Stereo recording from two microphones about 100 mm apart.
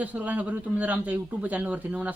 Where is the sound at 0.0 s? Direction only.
15° right (ahead or behind).